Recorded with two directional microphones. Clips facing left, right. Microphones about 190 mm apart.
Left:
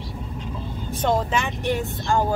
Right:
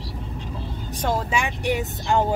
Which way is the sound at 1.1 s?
10° right (ahead or behind).